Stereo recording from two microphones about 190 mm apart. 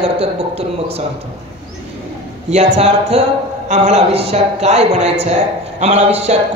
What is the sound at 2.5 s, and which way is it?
A woman's voice, 35° right (ahead or behind).